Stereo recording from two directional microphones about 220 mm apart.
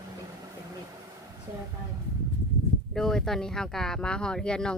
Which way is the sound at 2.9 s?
Centre (ahead or behind).